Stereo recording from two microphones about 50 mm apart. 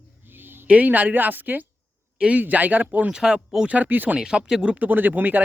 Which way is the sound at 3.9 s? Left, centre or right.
Right.